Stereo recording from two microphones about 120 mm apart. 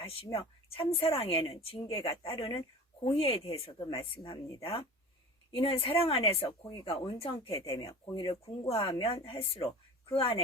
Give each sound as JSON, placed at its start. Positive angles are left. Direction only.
{"t": 0.0, "sound": "speech", "side_deg": 50}
{"t": 4.6, "sound": "speech", "side_deg": 55}